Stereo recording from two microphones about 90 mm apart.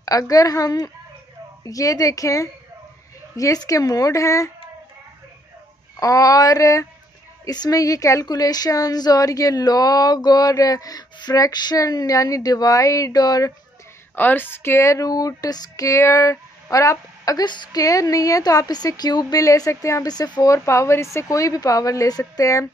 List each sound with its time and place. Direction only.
0.0 s speech: 40° left (ahead or behind)
5.9 s a woman's voice: 40° left (ahead or behind)
14.1 s speech: 20° left (ahead or behind); by 17.5 s 40° left (ahead or behind)
17.5 s a woman's voice: 55° left (ahead or behind)
17.8 s speech: 40° left (ahead or behind)
20.4 s speech: 35° left (ahead or behind)